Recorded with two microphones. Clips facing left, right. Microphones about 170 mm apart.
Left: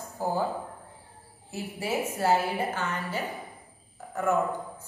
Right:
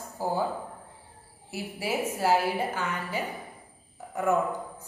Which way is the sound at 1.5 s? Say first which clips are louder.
Even; 10° right (ahead or behind).